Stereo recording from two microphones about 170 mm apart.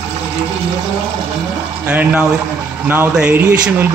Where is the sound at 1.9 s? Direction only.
10° right (ahead or behind).